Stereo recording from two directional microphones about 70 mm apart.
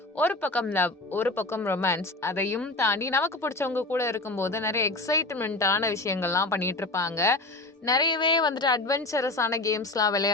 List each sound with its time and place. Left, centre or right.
0.2 s speech: left
7.9 s a woman's voice: left
9.0 s speech: left